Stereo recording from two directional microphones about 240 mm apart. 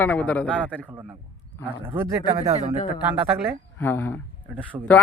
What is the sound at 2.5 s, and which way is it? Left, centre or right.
Speech, centre.